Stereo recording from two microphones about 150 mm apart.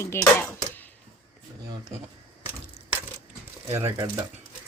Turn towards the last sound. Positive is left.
turn(degrees=-20)  # may be behind; listen again after turning